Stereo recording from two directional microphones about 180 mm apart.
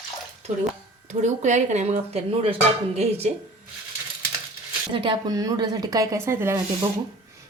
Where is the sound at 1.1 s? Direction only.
40° right (ahead or behind).